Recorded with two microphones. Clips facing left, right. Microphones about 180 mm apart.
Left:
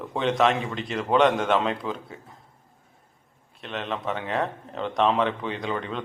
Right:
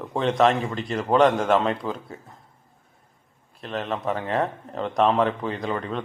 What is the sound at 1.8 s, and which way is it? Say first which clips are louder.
Speech: right 1 dB; 30° right (ahead or behind).